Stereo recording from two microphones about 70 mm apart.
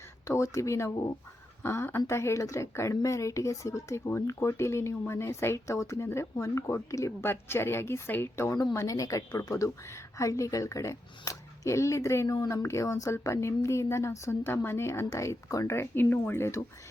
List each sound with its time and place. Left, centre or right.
0.3 s a woman's voice: left
1.6 s a woman's voice: left
8.7 s a woman's voice: left